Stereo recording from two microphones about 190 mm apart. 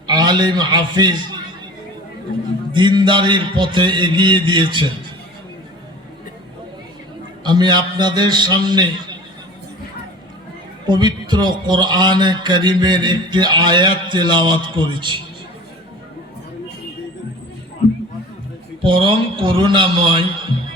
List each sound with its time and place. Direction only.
0.1 s a man's voice: 20° right (ahead or behind)
2.7 s a man's voice: 25° right (ahead or behind)
7.4 s a man's voice: 25° right (ahead or behind)
10.8 s a man's voice: 25° right (ahead or behind)
18.8 s a man's voice: 25° right (ahead or behind)